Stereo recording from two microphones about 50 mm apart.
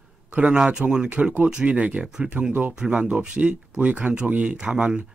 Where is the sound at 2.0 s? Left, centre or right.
Centre.